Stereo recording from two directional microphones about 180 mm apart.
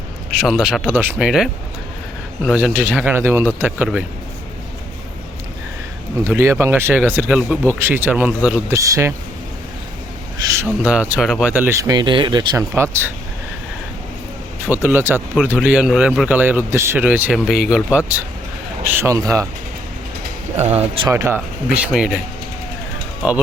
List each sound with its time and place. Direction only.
0.3 s speech: centre (ahead or behind)
6.2 s speech: 15° right (ahead or behind)
10.4 s speech: 15° right (ahead or behind)
14.7 s speech: 10° right (ahead or behind)
20.6 s speech: 35° right (ahead or behind)
21.1 s speech: 15° right (ahead or behind)